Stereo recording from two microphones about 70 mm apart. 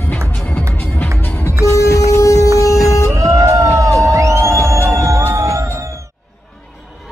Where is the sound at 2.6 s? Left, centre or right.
Left.